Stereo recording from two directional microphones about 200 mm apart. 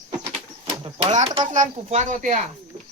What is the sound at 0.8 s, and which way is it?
A woman's voice, 35° right (ahead or behind).